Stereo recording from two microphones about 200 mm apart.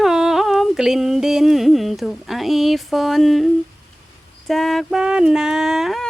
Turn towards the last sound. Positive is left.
turn(degrees=0)  # may be behind; listen again after turning